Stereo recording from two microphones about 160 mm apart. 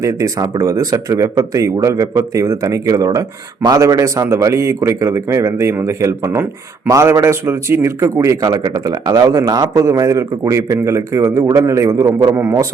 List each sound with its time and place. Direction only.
0.0 s speech: 20° right (ahead or behind)